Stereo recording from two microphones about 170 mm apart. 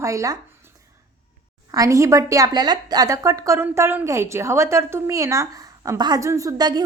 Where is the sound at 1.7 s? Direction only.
20° right (ahead or behind).